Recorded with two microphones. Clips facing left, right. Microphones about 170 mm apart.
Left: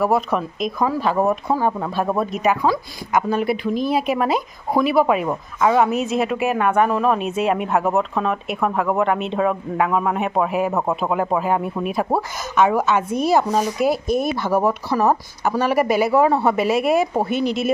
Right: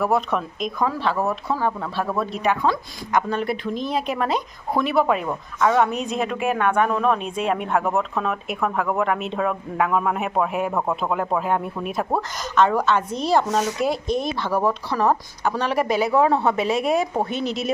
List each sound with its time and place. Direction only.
0.0 s speech: 5° left (ahead or behind)
1.3 s speech: 15° left (ahead or behind)
2.4 s speech: 5° left (ahead or behind)